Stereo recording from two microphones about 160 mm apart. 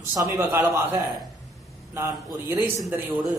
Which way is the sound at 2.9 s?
10° right (ahead or behind).